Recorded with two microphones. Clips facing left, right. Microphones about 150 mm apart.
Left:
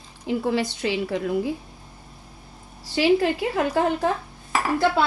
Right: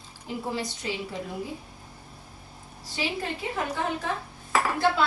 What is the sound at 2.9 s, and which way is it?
Speech, 90° left.